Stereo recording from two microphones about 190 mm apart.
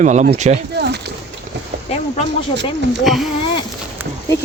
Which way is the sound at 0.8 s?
60° right (ahead or behind).